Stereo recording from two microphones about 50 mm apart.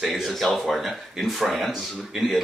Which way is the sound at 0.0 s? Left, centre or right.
Centre.